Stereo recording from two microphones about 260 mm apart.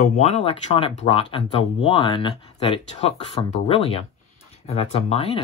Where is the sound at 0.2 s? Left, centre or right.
Left.